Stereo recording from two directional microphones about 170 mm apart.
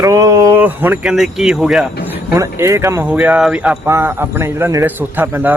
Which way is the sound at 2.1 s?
15° right (ahead or behind).